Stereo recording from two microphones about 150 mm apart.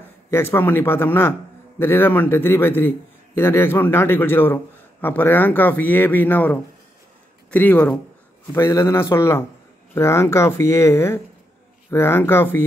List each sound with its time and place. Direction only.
0.3 s speech: 15° left (ahead or behind)